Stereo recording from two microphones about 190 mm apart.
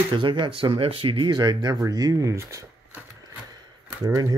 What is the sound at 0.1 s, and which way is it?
Speech, 25° right (ahead or behind).